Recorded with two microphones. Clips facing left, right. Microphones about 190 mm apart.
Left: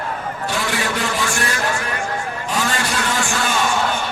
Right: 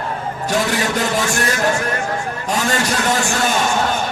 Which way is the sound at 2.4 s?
40° right (ahead or behind).